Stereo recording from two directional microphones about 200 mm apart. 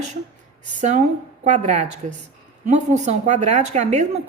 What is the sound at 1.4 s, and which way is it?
Speech, 40° right (ahead or behind).